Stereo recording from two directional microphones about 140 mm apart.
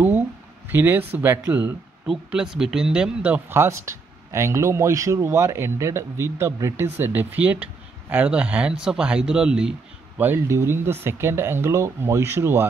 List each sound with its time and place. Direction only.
0.7 s speech: 15° right (ahead or behind)
2.0 s speech: 5° right (ahead or behind)